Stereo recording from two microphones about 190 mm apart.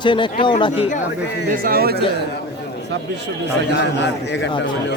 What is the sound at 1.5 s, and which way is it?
Speech, 50° right (ahead or behind).